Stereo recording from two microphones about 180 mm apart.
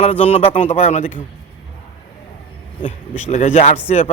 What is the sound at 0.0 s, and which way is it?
A man's voice, 35° left (ahead or behind).